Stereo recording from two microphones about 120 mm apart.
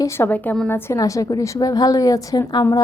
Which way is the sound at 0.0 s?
15° left (ahead or behind).